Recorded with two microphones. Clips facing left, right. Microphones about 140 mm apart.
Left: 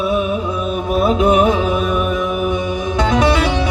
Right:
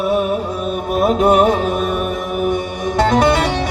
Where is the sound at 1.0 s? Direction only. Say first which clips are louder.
Right 1 dB; 45° right (ahead or behind).